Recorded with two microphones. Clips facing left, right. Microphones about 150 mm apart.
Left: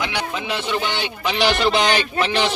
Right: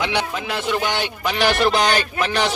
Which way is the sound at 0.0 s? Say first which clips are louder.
Right 2 dB; centre (ahead or behind).